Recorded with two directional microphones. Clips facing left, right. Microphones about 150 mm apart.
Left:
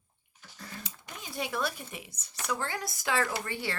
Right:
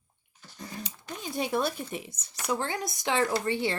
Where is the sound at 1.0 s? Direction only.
30° right (ahead or behind).